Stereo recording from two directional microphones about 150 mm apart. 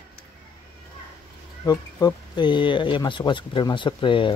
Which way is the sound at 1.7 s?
25° left (ahead or behind).